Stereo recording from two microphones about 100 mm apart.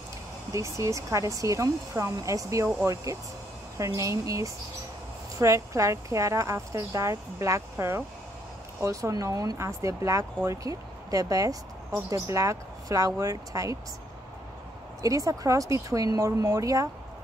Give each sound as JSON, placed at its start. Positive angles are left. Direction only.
{"t": 0.5, "sound": "speech", "side_deg": -30}
{"t": 15.0, "sound": "speech", "side_deg": -35}